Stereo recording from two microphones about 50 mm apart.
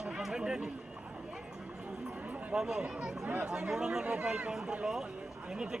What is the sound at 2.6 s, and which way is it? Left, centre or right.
Speech, centre.